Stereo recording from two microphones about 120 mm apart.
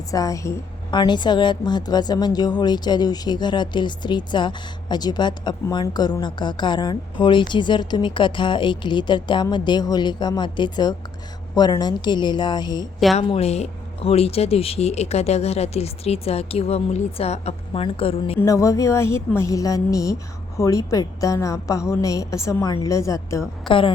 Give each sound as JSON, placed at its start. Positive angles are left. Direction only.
{"t": 0.1, "sound": "a woman's voice", "side_deg": 30}
{"t": 0.9, "sound": "a woman's voice", "side_deg": 40}
{"t": 13.2, "sound": "speech", "side_deg": 55}
{"t": 17.8, "sound": "a woman's voice", "side_deg": 50}
{"t": 18.3, "sound": "a woman's voice", "side_deg": 25}
{"t": 23.6, "sound": "a woman's voice", "side_deg": 45}